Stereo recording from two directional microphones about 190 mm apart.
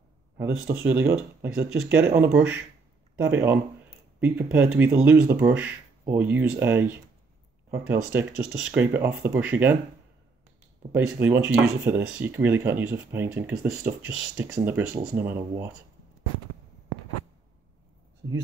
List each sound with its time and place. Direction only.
0.4 s speech: 10° right (ahead or behind)
10.9 s speech: 5° right (ahead or behind)